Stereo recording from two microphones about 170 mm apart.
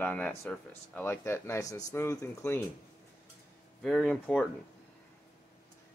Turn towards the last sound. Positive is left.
turn(degrees=5)  # may be behind; listen again after turning